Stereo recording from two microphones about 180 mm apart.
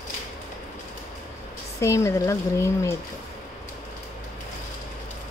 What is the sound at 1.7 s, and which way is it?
Speech, 15° left (ahead or behind).